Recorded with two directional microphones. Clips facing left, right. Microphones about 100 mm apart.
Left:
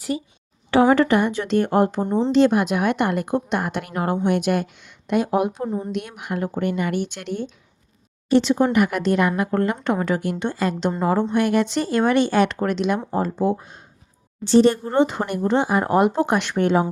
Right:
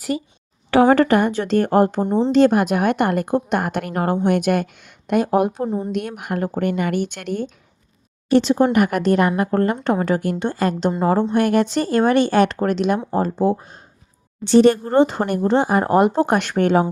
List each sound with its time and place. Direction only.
0.1 s a woman's voice: 55° right (ahead or behind); by 2.0 s 40° right (ahead or behind)
2.0 s speech: 15° right (ahead or behind)
2.3 s a woman's voice: 45° right (ahead or behind)
5.6 s speech: 20° right (ahead or behind)
5.9 s a woman's voice: 45° right (ahead or behind)
8.3 s a woman's voice: 40° right (ahead or behind)
12.5 s a woman's voice: 35° right (ahead or behind)
14.5 s speech: 60° right (ahead or behind)
14.8 s a woman's voice: 35° right (ahead or behind); by 16.8 s 55° right (ahead or behind)